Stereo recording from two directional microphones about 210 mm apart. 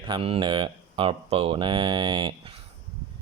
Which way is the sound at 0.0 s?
25° right (ahead or behind).